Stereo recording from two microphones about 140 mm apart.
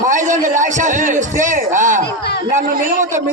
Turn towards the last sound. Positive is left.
turn(degrees=-60)  # may be behind; listen again after turning